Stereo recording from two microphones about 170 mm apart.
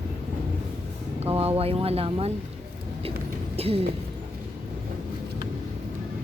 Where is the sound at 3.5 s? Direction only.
35° right (ahead or behind).